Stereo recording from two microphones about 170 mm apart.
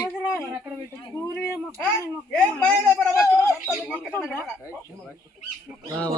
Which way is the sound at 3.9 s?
10° left (ahead or behind).